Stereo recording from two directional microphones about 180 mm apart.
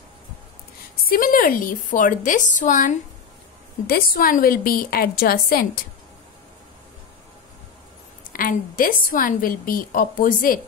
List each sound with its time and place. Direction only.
1.0 s a woman's voice: 50° left (ahead or behind)
8.3 s a woman's voice: 50° left (ahead or behind)